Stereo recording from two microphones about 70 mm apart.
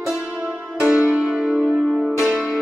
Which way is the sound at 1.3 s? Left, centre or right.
Centre.